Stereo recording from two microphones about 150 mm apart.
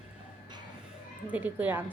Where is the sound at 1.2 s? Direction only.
10° right (ahead or behind).